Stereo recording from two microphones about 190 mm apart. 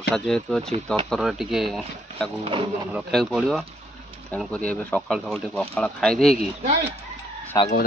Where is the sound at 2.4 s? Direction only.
25° right (ahead or behind).